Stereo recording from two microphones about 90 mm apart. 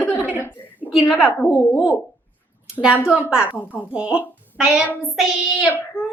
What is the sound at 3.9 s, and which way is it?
Speech, 15° right (ahead or behind).